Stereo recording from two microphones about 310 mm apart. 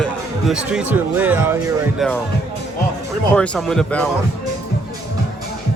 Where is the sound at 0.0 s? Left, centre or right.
Centre.